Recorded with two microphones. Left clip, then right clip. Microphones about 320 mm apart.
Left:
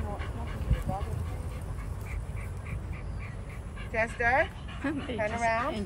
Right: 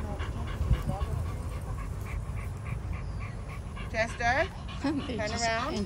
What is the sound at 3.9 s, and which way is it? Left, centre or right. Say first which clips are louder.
Dog: left 1 dB; left.